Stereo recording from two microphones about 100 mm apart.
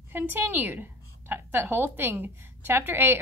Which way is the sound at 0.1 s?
20° right (ahead or behind).